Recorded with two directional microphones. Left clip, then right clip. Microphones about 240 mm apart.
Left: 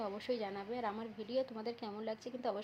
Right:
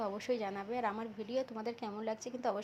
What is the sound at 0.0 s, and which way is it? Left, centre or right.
A woman's voice, centre.